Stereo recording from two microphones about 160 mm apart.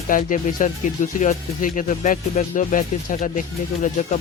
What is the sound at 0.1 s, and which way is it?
Speech, 55° left (ahead or behind).